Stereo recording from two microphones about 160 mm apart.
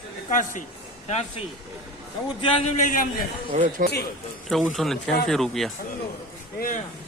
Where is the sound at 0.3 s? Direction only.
55° left (ahead or behind).